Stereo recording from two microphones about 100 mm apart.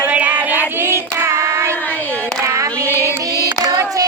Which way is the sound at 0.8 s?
25° right (ahead or behind).